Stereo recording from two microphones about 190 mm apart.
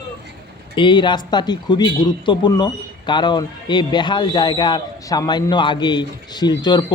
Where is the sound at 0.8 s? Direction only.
25° left (ahead or behind).